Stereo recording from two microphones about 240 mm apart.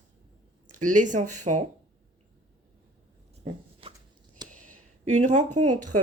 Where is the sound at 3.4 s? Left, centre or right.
Right.